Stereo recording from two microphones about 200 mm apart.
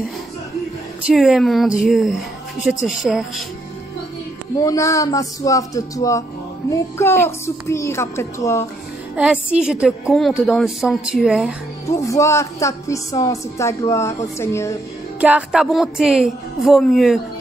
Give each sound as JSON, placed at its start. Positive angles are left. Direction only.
{"t": 1.0, "sound": "a woman's voice", "side_deg": 0}
{"t": 4.6, "sound": "a woman's voice", "side_deg": 15}
{"t": 9.1, "sound": "a woman's voice", "side_deg": -5}
{"t": 11.9, "sound": "a woman's voice", "side_deg": 15}
{"t": 15.1, "sound": "a woman's voice", "side_deg": -5}